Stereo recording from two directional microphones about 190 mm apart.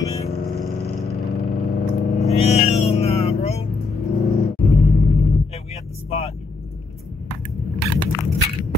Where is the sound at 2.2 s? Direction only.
35° left (ahead or behind).